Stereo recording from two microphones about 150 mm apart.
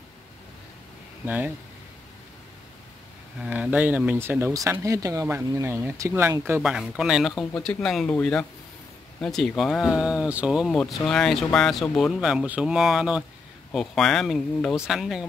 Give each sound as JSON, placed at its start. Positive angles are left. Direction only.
{"t": 1.2, "sound": "speech", "side_deg": -10}
{"t": 3.3, "sound": "speech", "side_deg": -5}
{"t": 6.6, "sound": "speech", "side_deg": -5}